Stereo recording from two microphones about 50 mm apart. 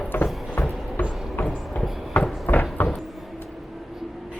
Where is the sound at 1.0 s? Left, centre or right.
Left.